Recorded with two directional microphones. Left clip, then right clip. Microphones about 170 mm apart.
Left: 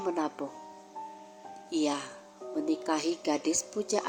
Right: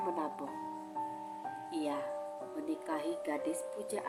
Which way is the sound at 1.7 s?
35° left (ahead or behind).